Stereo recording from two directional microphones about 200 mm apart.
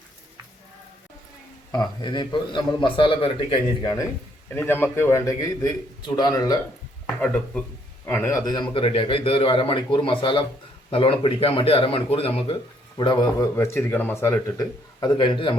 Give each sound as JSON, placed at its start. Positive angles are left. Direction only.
{"t": 1.7, "sound": "a man's voice", "side_deg": 20}
{"t": 4.4, "sound": "a man's voice", "side_deg": 10}
{"t": 7.2, "sound": "a man's voice", "side_deg": 5}